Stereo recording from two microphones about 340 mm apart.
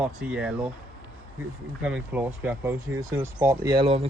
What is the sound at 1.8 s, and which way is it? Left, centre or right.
Speech, centre.